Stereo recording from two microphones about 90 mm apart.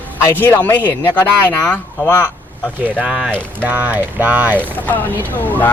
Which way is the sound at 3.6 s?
20° right (ahead or behind).